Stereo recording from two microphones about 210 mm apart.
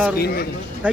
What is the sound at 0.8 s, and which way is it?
Speech, 5° right (ahead or behind).